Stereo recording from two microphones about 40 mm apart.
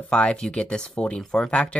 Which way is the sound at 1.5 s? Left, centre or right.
Left.